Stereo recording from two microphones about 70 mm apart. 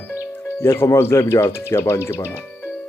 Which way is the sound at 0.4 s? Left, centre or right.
Left.